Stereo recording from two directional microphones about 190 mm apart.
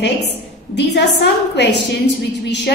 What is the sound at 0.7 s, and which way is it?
A woman's voice, 65° left (ahead or behind).